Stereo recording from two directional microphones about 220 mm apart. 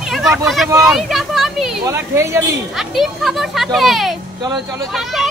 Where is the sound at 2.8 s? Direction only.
Centre (ahead or behind).